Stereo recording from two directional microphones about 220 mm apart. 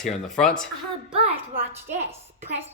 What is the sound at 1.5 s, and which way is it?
Speech, 30° right (ahead or behind).